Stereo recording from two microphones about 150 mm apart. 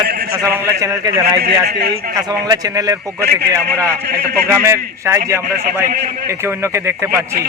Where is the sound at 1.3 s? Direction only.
90° right.